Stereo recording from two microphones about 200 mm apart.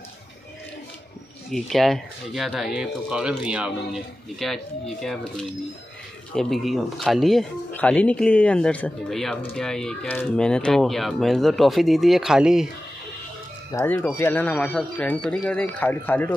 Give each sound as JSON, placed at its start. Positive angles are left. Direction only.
{"t": 1.5, "sound": "speech", "side_deg": 0}
{"t": 13.7, "sound": "speech", "side_deg": 10}